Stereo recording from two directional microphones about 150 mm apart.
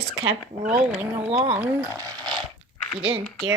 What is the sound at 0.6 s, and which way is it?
Speech, 5° right (ahead or behind).